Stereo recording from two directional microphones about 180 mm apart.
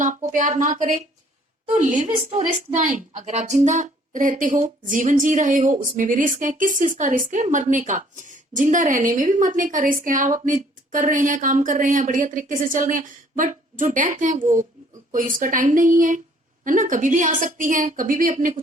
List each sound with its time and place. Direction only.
0.0 s a woman's voice: 45° right (ahead or behind)